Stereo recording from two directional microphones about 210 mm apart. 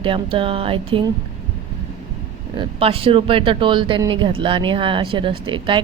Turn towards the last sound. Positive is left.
turn(degrees=-25)  # may be behind; listen again after turning